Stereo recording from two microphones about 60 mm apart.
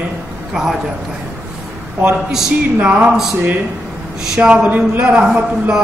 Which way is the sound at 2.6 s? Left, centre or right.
Right.